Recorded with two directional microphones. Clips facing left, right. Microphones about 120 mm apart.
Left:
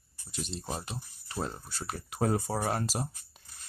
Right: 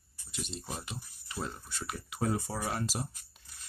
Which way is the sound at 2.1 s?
50° left (ahead or behind).